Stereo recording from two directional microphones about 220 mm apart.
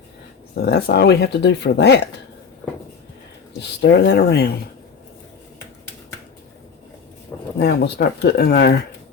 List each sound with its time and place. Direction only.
0.5 s speech: 50° left (ahead or behind)
3.6 s speech: 50° left (ahead or behind)
7.6 s speech: 45° left (ahead or behind)